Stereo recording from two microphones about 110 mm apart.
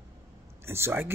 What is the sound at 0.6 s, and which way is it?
Speech, 20° right (ahead or behind).